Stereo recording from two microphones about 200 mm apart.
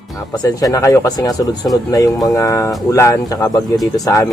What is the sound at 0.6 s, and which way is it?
Speech, 15° left (ahead or behind).